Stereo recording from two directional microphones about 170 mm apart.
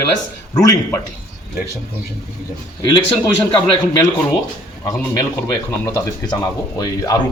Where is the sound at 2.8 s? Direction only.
30° left (ahead or behind).